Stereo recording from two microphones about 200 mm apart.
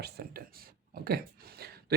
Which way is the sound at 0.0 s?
50° right (ahead or behind).